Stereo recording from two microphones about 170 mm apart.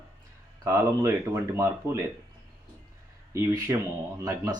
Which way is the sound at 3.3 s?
15° right (ahead or behind).